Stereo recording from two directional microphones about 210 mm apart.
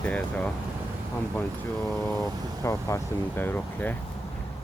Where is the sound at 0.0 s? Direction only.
5° left (ahead or behind).